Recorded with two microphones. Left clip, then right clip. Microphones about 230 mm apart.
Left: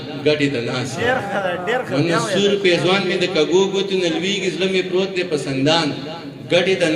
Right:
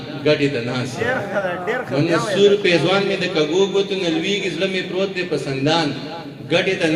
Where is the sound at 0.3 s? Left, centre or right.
Left.